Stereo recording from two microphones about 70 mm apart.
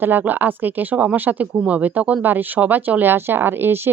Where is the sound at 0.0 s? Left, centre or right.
Right.